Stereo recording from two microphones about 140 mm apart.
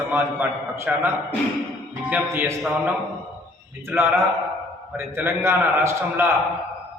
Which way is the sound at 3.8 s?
15° right (ahead or behind).